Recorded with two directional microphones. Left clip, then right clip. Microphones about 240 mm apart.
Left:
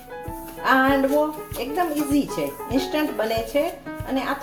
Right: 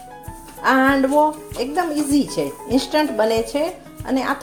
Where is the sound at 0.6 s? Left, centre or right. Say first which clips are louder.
Right 3 dB; right.